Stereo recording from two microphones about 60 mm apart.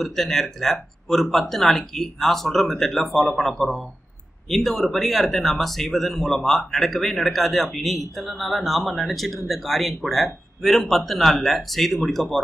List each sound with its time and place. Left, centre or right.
0.0 s speech: centre